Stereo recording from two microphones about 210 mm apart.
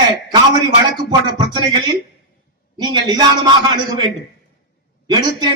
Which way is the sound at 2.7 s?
20° right (ahead or behind).